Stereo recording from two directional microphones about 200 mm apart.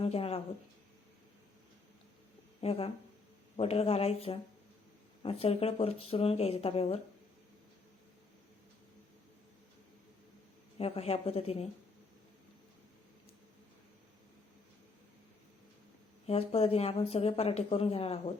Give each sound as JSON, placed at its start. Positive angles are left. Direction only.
{"t": 0.0, "sound": "speech", "side_deg": 30}
{"t": 2.6, "sound": "speech", "side_deg": 30}
{"t": 10.8, "sound": "speech", "side_deg": 30}
{"t": 16.2, "sound": "speech", "side_deg": 30}